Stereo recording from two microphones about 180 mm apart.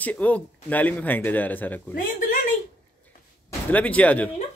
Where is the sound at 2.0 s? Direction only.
50° left (ahead or behind).